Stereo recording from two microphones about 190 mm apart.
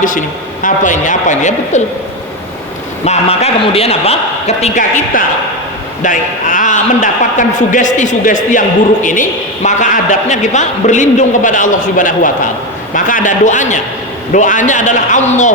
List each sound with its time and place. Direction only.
0.0 s a man's voice: 45° left (ahead or behind)
3.0 s a man's voice: 35° left (ahead or behind)
9.6 s a man's voice: 40° left (ahead or behind)